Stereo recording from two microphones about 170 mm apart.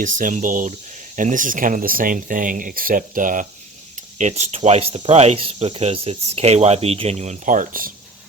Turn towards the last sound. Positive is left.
turn(degrees=-55)  # may be behind; listen again after turning